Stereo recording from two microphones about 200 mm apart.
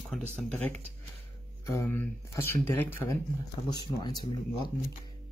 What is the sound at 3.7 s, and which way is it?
Speech, 20° left (ahead or behind).